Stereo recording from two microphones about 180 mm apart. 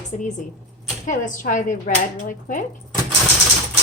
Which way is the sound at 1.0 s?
45° left (ahead or behind).